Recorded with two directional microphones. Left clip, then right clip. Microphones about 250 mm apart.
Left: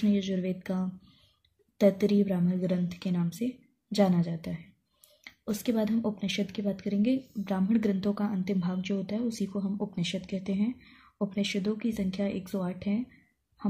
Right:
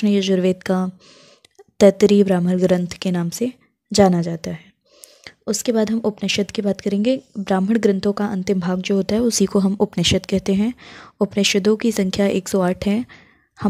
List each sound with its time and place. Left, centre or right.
0.0 s speech: right